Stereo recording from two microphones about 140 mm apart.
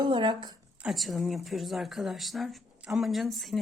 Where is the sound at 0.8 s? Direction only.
Centre (ahead or behind).